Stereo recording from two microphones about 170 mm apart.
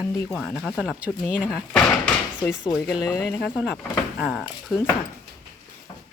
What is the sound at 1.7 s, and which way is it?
Door, 5° left (ahead or behind).